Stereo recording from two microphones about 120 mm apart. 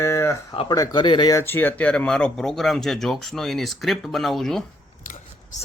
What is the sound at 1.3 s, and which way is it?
Speech, 20° left (ahead or behind).